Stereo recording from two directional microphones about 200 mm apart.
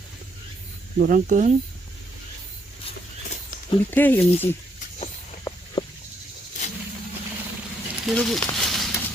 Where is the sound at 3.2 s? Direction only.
35° left (ahead or behind).